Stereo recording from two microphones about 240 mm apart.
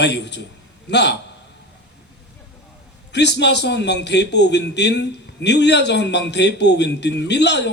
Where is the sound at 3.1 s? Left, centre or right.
Left.